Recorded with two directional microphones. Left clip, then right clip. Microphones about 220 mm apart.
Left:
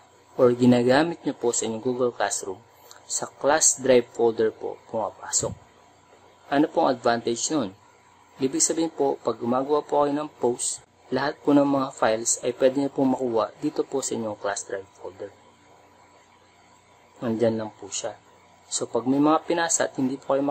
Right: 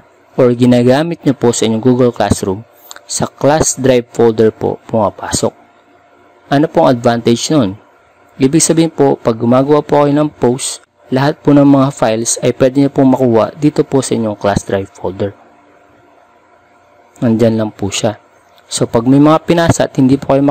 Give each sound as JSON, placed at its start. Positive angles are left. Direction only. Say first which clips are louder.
{"t": 0.5, "sound": "a man's voice", "louder": "right 9 dB", "side_deg": -35}
{"t": 6.5, "sound": "a man's voice", "louder": "right 12 dB", "side_deg": -35}
{"t": 17.2, "sound": "a man's voice", "louder": "right 12 dB", "side_deg": -35}